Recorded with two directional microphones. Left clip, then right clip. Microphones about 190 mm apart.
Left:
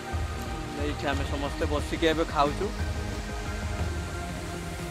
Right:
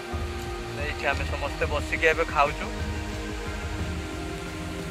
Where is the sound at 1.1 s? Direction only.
20° right (ahead or behind).